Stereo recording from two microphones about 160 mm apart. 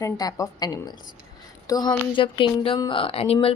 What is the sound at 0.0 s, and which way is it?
A woman's voice, 20° left (ahead or behind).